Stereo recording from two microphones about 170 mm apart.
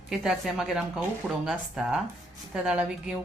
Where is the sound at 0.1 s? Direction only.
Centre (ahead or behind).